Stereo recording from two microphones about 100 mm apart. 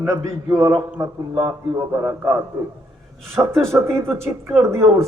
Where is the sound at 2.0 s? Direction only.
25° right (ahead or behind).